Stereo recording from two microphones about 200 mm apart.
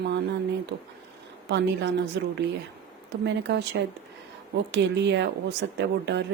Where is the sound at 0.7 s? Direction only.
50° right (ahead or behind).